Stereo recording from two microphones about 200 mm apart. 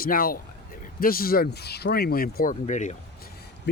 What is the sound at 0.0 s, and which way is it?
Speech, 45° left (ahead or behind).